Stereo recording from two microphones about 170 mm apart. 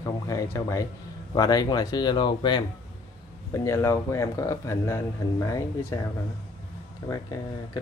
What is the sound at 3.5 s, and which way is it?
Speech, 15° left (ahead or behind).